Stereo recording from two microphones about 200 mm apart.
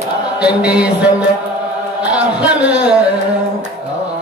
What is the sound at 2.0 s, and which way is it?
Music, 5° right (ahead or behind).